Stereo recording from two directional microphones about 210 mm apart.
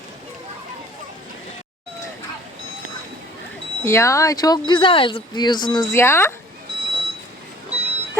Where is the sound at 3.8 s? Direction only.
15° left (ahead or behind).